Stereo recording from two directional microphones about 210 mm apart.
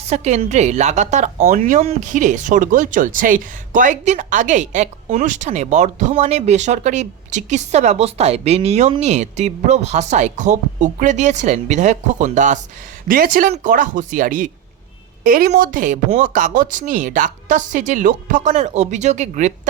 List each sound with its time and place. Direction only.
0.1 s a woman's voice: 35° right (ahead or behind)